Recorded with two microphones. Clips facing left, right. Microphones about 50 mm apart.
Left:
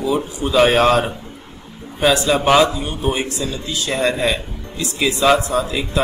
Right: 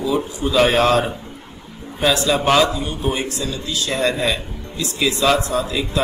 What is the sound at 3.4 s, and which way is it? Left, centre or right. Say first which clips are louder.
A man's voice: left 1 dB; left.